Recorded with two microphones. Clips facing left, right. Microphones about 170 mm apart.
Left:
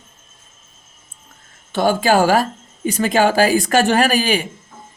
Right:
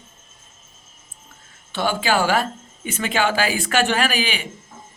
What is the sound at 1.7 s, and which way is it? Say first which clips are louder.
A man's voice: left 6 dB; 45° left (ahead or behind).